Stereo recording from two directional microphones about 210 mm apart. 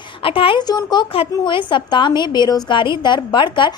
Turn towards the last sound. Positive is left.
turn(degrees=20)  # may be behind; listen again after turning